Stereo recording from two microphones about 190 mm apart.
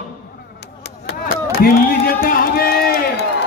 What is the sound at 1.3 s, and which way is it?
Run, 55° left (ahead or behind).